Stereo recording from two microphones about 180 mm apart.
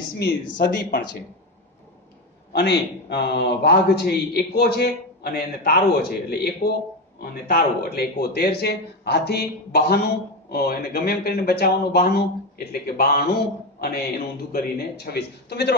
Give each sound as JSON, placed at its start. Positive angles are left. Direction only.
{"t": 0.2, "sound": "speech", "side_deg": 65}
{"t": 2.5, "sound": "a man's voice", "side_deg": 70}